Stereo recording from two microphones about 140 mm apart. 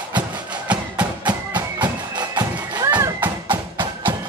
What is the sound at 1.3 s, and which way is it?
Music, 35° right (ahead or behind).